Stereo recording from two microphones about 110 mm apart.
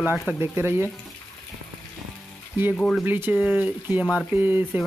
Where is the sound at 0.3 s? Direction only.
20° right (ahead or behind).